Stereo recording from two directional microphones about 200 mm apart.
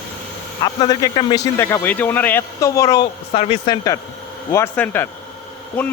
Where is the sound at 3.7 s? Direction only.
15° left (ahead or behind).